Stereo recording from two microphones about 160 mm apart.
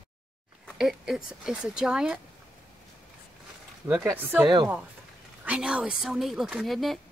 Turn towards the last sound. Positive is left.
turn(degrees=0)  # may be behind; listen again after turning